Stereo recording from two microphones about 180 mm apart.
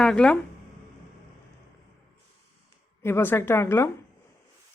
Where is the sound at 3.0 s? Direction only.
10° left (ahead or behind).